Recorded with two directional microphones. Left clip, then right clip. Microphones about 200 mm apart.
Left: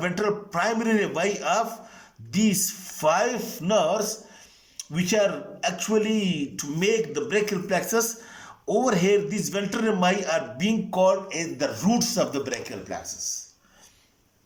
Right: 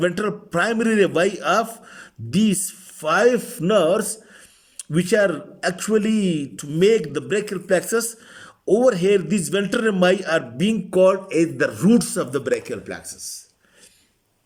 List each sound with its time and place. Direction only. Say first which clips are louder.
0.0 s a man's voice: right 3 dB; 60° right (ahead or behind)